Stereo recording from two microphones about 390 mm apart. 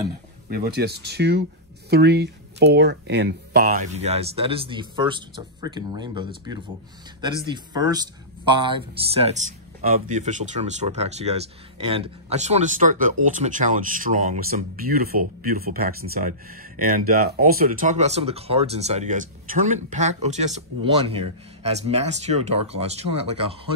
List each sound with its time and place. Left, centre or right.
0.5 s speech: right